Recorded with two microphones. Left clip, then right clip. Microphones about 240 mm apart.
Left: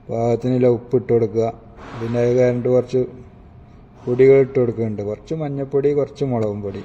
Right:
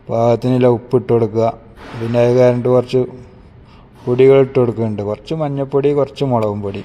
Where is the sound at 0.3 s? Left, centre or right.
Centre.